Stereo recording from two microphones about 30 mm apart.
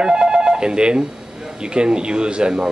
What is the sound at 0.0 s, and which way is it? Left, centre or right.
Telephone, right.